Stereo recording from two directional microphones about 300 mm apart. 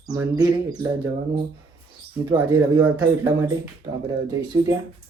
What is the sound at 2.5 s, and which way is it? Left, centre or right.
Speech, centre.